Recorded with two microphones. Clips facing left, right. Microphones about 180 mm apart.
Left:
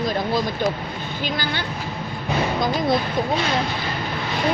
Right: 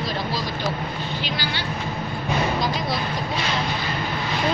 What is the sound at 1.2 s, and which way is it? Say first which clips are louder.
Speech: left 6 dB; 50° left (ahead or behind).